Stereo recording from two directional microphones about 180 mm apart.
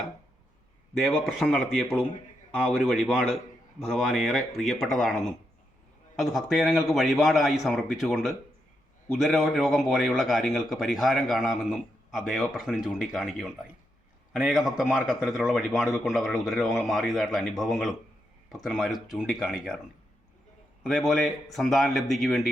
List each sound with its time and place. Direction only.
0.9 s a man's voice: centre (ahead or behind)
20.8 s a man's voice: centre (ahead or behind)